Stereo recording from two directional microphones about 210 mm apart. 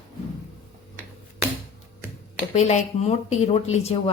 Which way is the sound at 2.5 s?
30° left (ahead or behind).